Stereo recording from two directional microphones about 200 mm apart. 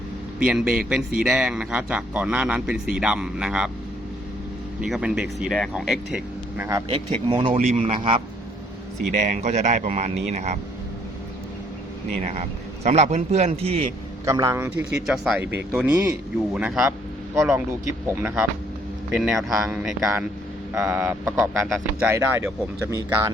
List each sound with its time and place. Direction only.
0.3 s speech: 5° right (ahead or behind)
4.8 s speech: 5° right (ahead or behind)
6.9 s a man's voice: 25° right (ahead or behind)
9.1 s a man's voice: 40° right (ahead or behind)
12.2 s a man's voice: 35° right (ahead or behind)
14.3 s speech: 15° right (ahead or behind)
15.0 s speech: centre (ahead or behind)
18.1 s speech: 10° right (ahead or behind)
22.1 s speech: 10° right (ahead or behind)